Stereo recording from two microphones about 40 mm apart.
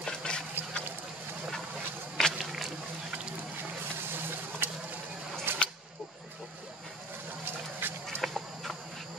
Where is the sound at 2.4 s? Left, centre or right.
Centre.